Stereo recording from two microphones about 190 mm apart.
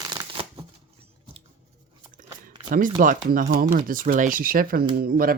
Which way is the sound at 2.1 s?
45° right (ahead or behind).